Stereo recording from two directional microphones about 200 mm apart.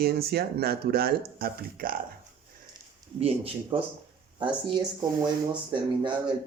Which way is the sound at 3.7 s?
25° right (ahead or behind).